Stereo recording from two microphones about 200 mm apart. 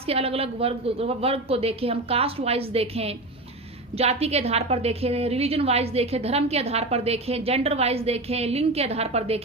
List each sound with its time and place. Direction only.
0.0 s a woman's voice: 30° right (ahead or behind)